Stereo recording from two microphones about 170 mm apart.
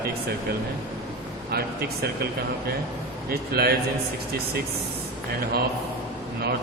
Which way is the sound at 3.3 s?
65° right (ahead or behind).